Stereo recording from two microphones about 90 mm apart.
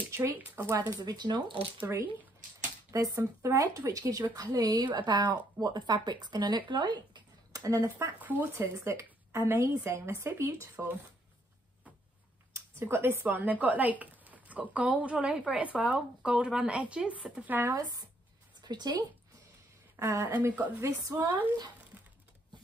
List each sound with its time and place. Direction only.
0.1 s speech: 35° right (ahead or behind); by 1.7 s 65° right (ahead or behind)
2.9 s a woman's voice: 40° right (ahead or behind)
4.9 s speech: 60° right (ahead or behind)
7.6 s a woman's voice: 35° right (ahead or behind)
8.2 s speech: 20° right (ahead or behind)
8.7 s a woman's voice: 35° right (ahead or behind)
12.5 s speech: 25° right (ahead or behind)
17.7 s speech: 45° right (ahead or behind)
20.0 s a woman's voice: 35° right (ahead or behind)
20.3 s speech: 20° right (ahead or behind)
20.8 s a woman's voice: 35° right (ahead or behind)
21.2 s speech: 20° right (ahead or behind)
21.9 s a sound: 20° right (ahead or behind)